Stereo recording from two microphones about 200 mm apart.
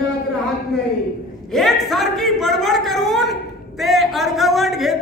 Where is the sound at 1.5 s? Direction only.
Centre (ahead or behind).